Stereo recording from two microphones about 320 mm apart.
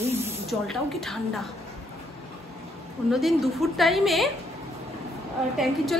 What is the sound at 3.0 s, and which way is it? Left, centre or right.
Speech, centre.